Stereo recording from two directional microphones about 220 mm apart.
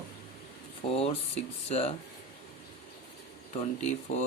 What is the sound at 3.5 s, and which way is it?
Speech, 30° left (ahead or behind).